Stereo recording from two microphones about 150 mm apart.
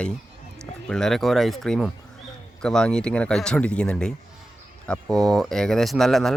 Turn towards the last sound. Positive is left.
turn(degrees=0)  # may be behind; listen again after turning